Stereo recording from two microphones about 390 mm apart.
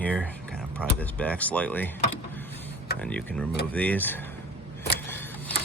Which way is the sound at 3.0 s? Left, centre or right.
Centre.